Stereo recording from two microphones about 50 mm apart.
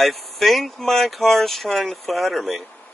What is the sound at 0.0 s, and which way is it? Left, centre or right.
Speech, centre.